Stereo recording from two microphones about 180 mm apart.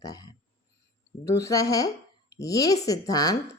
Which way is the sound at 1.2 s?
15° left (ahead or behind).